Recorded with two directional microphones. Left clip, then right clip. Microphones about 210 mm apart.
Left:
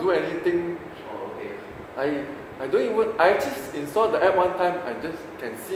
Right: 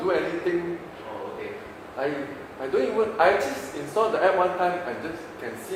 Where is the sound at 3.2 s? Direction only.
40° left (ahead or behind).